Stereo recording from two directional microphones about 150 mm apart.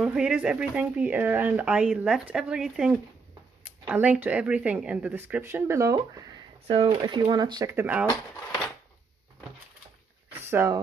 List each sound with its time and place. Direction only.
0.0 s speech: 5° right (ahead or behind)
6.7 s speech: 35° right (ahead or behind)
7.7 s speech: 10° right (ahead or behind)
10.5 s speech: 15° right (ahead or behind)